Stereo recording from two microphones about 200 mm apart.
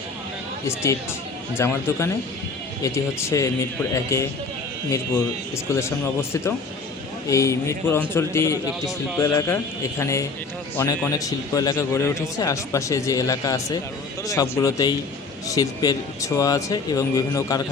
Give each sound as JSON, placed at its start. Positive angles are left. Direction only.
{"t": 1.5, "sound": "a man's voice", "side_deg": 10}
{"t": 5.7, "sound": "a man's voice", "side_deg": 15}
{"t": 7.3, "sound": "a man's voice", "side_deg": 15}